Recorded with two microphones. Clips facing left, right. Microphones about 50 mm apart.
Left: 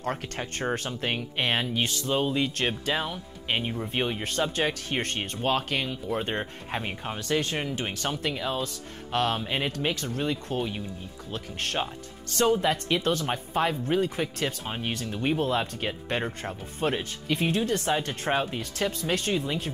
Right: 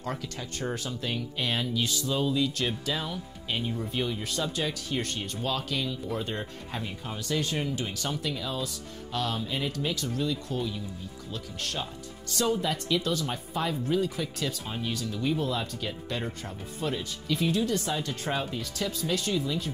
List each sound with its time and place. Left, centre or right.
0.0 s speech: left